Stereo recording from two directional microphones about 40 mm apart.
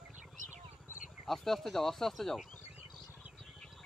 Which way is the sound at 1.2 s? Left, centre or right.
Centre.